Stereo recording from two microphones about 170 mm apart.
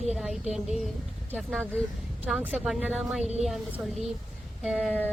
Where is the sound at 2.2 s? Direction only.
10° right (ahead or behind).